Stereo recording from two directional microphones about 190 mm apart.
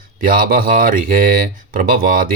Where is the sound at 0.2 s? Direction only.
45° right (ahead or behind).